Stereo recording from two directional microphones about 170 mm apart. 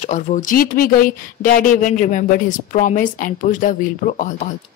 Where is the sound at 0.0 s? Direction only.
45° left (ahead or behind).